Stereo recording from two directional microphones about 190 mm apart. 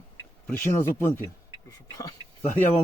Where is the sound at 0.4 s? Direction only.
10° left (ahead or behind).